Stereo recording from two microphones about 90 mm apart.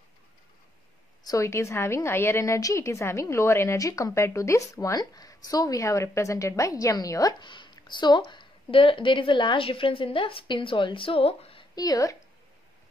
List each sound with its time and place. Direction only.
1.2 s a woman's voice: 35° left (ahead or behind)
7.3 s a woman's voice: 60° left (ahead or behind); by 11.6 s 90° left
11.7 s a woman's voice: 45° left (ahead or behind)